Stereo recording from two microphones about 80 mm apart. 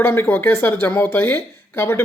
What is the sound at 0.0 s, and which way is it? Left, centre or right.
Speech, left.